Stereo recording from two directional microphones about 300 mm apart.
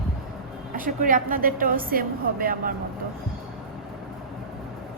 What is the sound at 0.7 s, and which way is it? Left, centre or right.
A woman's voice, right.